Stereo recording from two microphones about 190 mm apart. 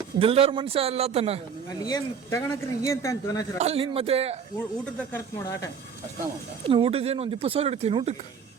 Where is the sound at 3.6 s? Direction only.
30° right (ahead or behind).